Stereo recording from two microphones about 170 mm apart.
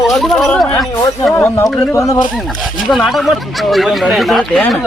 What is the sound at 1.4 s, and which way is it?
Speech, 15° left (ahead or behind).